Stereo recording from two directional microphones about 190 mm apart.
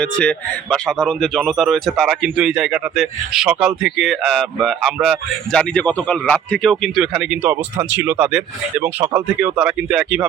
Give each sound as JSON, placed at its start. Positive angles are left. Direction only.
{"t": 0.0, "sound": "speech", "side_deg": 5}